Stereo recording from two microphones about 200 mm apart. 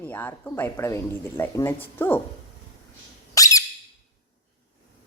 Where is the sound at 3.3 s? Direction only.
15° left (ahead or behind).